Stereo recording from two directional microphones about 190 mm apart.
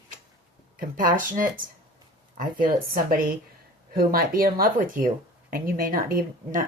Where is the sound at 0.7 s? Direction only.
45° right (ahead or behind).